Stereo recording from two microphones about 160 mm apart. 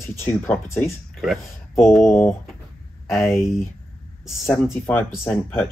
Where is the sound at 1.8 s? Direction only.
Centre (ahead or behind).